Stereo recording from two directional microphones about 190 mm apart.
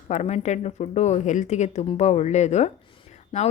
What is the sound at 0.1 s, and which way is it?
Speech, 35° left (ahead or behind).